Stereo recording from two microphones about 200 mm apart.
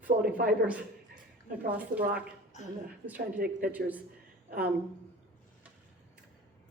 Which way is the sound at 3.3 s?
45° right (ahead or behind).